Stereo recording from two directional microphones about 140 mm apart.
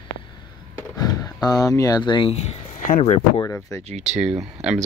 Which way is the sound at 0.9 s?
25° left (ahead or behind).